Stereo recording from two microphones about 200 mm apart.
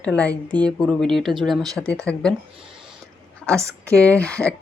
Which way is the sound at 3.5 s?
15° right (ahead or behind).